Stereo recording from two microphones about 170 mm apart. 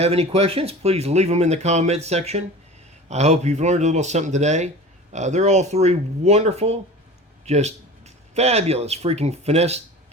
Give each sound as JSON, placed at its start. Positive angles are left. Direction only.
{"t": 0.0, "sound": "speech", "side_deg": -35}